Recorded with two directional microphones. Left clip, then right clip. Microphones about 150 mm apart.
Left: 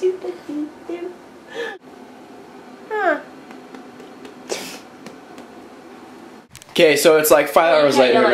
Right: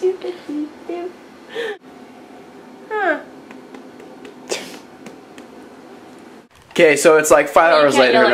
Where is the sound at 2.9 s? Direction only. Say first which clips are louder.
Even; centre (ahead or behind).